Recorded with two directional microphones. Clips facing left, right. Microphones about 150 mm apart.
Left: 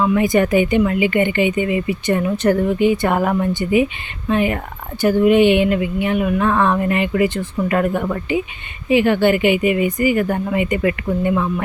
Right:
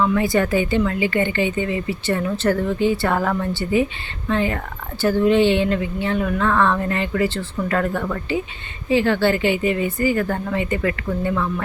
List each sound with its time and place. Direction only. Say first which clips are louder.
0.0 s speech: left 3 dB; 15° left (ahead or behind)